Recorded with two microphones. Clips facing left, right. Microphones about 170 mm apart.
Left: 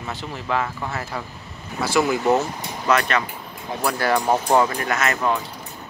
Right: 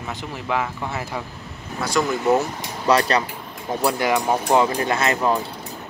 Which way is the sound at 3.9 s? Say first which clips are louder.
Even; 15° right (ahead or behind).